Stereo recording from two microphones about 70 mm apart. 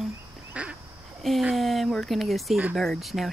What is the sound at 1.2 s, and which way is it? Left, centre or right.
Speech, centre.